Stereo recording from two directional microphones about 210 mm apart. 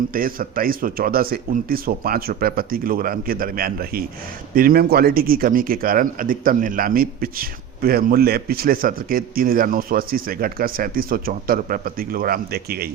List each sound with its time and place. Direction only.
0.1 s a man's voice: 40° right (ahead or behind)